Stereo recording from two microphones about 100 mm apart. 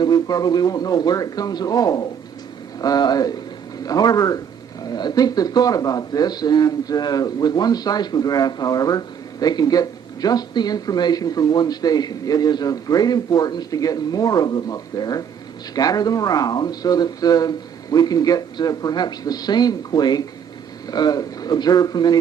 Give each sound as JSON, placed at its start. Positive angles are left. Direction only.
{"t": 0.0, "sound": "speech", "side_deg": 40}